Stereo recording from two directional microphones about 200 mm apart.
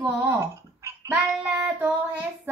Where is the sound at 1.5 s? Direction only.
5° right (ahead or behind).